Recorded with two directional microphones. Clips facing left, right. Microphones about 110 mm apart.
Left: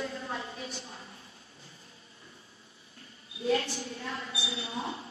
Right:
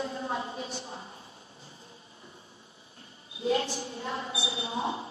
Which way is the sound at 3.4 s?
25° right (ahead or behind).